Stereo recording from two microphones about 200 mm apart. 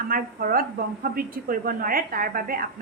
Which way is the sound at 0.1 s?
45° right (ahead or behind).